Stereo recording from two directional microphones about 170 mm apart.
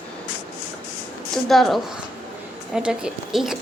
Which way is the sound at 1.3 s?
Centre (ahead or behind).